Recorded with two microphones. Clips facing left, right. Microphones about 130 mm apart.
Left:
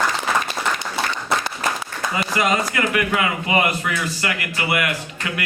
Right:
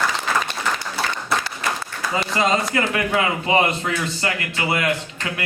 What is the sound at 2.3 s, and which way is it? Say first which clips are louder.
A man's voice: right 1 dB; 25° right (ahead or behind).